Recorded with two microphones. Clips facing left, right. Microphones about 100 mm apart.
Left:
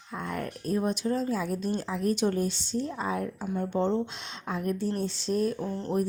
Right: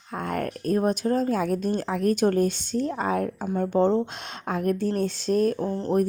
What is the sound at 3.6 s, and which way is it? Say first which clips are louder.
Speech: right 6 dB; 50° right (ahead or behind).